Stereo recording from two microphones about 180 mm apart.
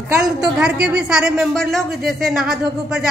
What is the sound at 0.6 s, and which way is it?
Speech, 5° right (ahead or behind).